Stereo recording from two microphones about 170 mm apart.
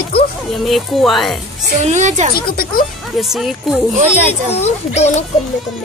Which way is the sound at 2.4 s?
60° left (ahead or behind).